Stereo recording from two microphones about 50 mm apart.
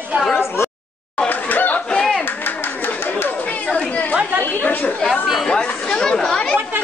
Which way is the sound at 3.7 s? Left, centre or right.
Left.